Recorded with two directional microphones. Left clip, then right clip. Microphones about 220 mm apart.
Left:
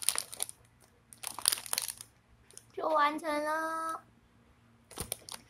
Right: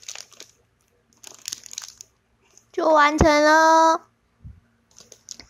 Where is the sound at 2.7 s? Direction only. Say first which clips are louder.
Right 12 dB; 35° right (ahead or behind).